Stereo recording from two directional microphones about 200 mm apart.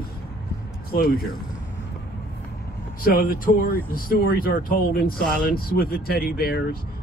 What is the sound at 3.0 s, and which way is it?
Speech, 45° left (ahead or behind).